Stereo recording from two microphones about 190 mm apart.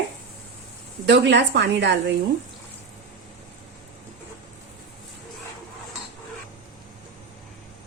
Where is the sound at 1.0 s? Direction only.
65° right (ahead or behind).